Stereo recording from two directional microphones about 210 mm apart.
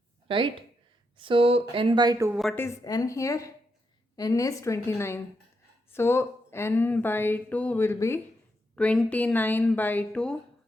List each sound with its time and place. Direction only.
0.3 s speech: 25° right (ahead or behind)
2.4 s a woman's voice: centre (ahead or behind)
2.6 s speech: 15° left (ahead or behind)